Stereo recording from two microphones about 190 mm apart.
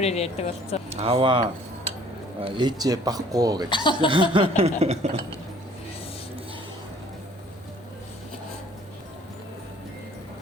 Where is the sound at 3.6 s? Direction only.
25° left (ahead or behind).